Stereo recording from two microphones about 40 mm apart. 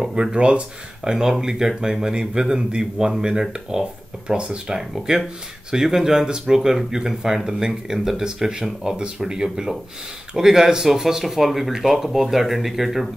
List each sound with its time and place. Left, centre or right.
0.0 s speech: centre